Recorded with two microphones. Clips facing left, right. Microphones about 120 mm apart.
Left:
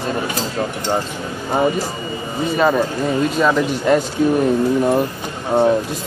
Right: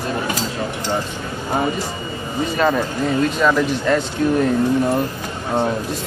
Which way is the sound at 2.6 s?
10° left (ahead or behind).